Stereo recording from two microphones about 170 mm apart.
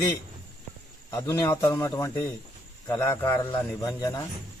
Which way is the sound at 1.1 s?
15° left (ahead or behind).